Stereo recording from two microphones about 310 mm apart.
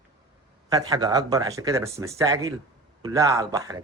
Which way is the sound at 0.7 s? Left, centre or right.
Centre.